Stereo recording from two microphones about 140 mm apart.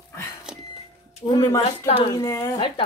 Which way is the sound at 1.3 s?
25° left (ahead or behind).